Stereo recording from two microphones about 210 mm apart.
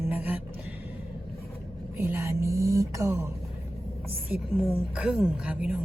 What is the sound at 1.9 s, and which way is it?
A woman's voice, 10° right (ahead or behind).